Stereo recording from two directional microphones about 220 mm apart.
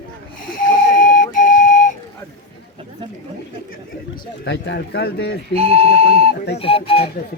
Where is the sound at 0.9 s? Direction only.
35° left (ahead or behind).